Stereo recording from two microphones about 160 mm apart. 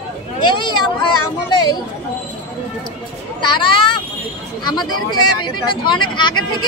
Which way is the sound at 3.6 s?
30° left (ahead or behind).